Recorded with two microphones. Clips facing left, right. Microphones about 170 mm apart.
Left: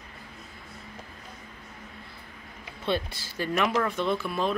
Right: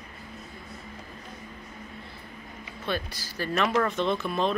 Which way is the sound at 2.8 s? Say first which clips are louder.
Left 3 dB; 25° left (ahead or behind).